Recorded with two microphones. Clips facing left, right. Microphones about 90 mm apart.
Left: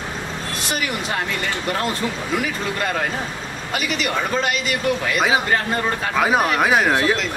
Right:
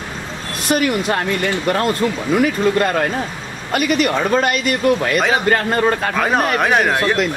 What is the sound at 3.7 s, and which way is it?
Speech, 50° right (ahead or behind).